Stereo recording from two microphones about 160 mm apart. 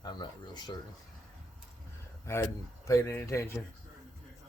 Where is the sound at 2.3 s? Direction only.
15° left (ahead or behind).